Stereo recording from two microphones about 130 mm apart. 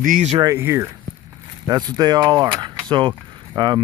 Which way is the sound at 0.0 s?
75° right (ahead or behind).